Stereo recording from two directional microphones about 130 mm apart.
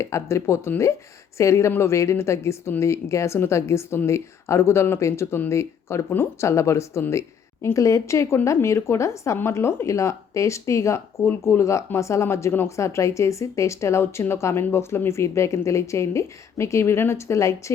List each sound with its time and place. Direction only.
0.0 s speech: 20° left (ahead or behind)